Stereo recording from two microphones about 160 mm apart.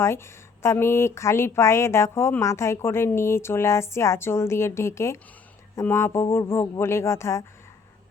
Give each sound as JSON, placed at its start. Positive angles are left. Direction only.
{"t": 0.0, "sound": "speech", "side_deg": 15}